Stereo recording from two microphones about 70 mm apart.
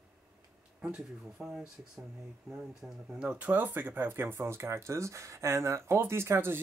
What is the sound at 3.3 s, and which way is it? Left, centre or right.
Speech, right.